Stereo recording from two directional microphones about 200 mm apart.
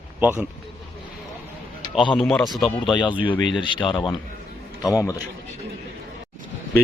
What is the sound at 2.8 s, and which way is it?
A man's voice, 25° left (ahead or behind).